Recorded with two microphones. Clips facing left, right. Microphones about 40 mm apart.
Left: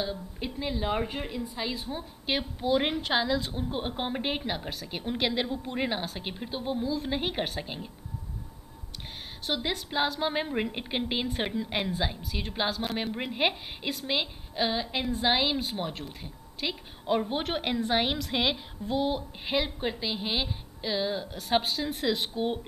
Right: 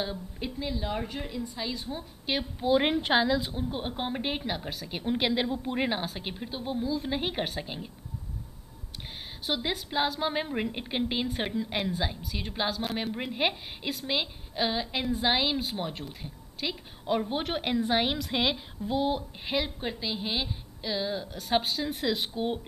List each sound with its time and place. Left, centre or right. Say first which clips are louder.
0.4 s a woman's voice: left 1 dB; centre
1.5 s a woman's voice: left 1 dB; centre
2.6 s a woman's voice: right 3 dB; centre
3.6 s a woman's voice: left 1 dB; centre
9.5 s a woman's voice: even; centre